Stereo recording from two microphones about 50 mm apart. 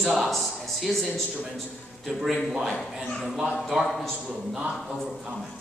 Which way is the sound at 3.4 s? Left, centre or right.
Centre.